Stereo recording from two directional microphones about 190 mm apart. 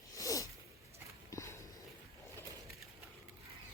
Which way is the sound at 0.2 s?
15° left (ahead or behind).